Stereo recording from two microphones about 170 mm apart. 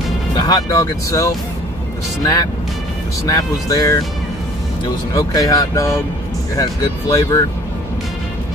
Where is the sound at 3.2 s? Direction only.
20° left (ahead or behind).